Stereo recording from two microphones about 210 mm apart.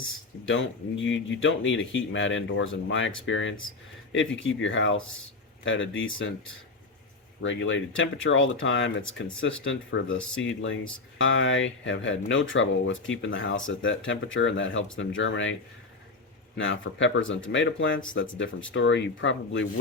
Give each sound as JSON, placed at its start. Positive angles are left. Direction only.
{"t": 0.4, "sound": "speech", "side_deg": 65}
{"t": 7.4, "sound": "speech", "side_deg": 65}
{"t": 16.6, "sound": "speech", "side_deg": 65}